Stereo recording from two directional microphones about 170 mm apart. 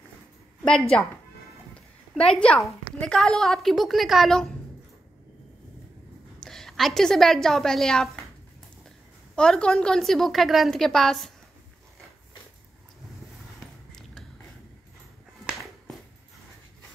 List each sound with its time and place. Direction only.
0.7 s a woman's voice: 5° left (ahead or behind)
2.1 s a woman's voice: 5° left (ahead or behind)
6.4 s a woman's voice: centre (ahead or behind)
9.3 s a woman's voice: 5° left (ahead or behind)